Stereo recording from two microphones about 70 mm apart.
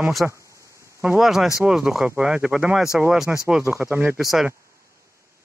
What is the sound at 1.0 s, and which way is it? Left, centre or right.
Speech, centre.